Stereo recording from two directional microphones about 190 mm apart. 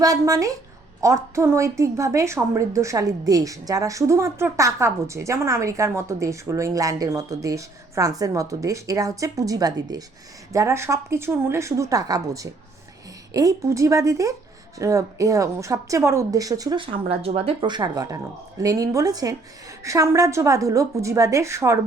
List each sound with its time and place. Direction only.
0.0 s a woman's voice: 15° right (ahead or behind)